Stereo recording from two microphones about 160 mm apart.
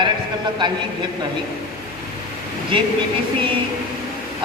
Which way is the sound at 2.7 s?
30° right (ahead or behind).